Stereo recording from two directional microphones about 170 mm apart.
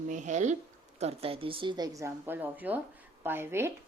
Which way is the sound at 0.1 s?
45° right (ahead or behind).